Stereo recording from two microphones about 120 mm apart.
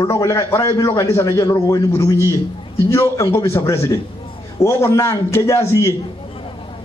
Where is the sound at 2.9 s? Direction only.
25° left (ahead or behind).